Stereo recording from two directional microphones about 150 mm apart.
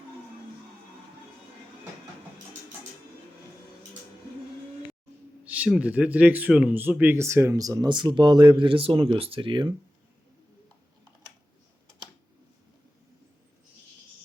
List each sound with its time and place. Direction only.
5.5 s speech: 5° right (ahead or behind); by 9.7 s 35° right (ahead or behind)